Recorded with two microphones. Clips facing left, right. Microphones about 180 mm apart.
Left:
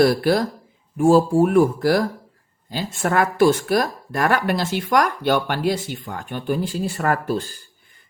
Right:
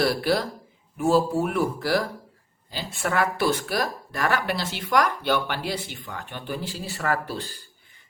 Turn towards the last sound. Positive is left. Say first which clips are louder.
# left 6 dB
turn(degrees=50)  # may be behind; listen again after turning